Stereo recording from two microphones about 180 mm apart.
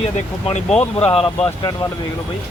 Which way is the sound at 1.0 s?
30° left (ahead or behind).